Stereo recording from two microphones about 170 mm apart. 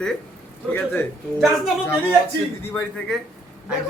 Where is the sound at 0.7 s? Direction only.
10° left (ahead or behind).